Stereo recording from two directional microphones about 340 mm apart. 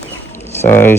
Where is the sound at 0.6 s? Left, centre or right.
Centre.